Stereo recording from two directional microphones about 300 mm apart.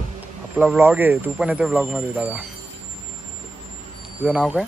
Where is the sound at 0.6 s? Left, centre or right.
Centre.